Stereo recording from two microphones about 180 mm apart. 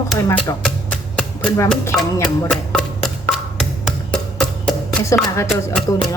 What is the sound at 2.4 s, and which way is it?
Wood block, 5° left (ahead or behind).